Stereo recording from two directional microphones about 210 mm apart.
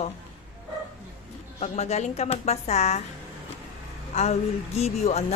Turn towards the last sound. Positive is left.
turn(degrees=30)  # may be behind; listen again after turning